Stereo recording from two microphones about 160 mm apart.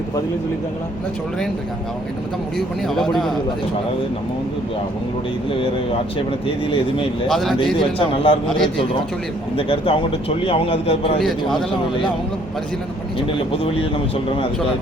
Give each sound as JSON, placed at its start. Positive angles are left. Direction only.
{"t": 2.6, "sound": "a man's voice", "side_deg": 0}
{"t": 5.5, "sound": "speech", "side_deg": 35}
{"t": 7.3, "sound": "a man's voice", "side_deg": 0}
{"t": 7.8, "sound": "speech", "side_deg": 35}
{"t": 11.2, "sound": "a man's voice", "side_deg": 0}
{"t": 13.1, "sound": "speech", "side_deg": 35}